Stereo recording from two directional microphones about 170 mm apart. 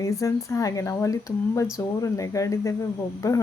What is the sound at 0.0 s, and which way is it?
Speech, 20° left (ahead or behind).